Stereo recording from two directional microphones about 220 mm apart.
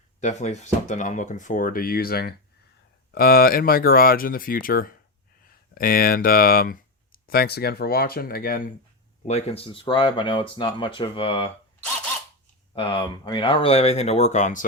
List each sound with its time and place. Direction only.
0.2 s speech: 30° left (ahead or behind)
9.2 s speech: 30° left (ahead or behind)
12.7 s speech: 25° left (ahead or behind)